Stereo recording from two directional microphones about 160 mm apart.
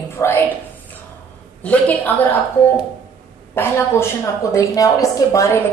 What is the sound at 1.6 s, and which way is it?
Speech, 10° left (ahead or behind).